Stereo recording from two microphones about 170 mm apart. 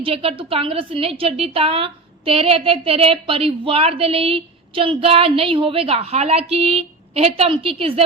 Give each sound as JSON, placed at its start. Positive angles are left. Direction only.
{"t": 0.0, "sound": "a woman's voice", "side_deg": -35}